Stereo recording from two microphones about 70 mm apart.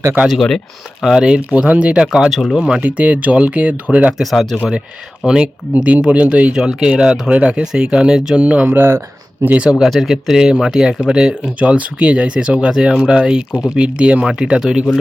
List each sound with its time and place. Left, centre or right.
0.3 s speech: centre
1.0 s speech: centre
2.6 s speech: centre
4.2 s speech: centre
5.2 s speech: centre
8.6 s speech: right
9.6 s speech: centre
13.5 s speech: left
13.7 s speech: centre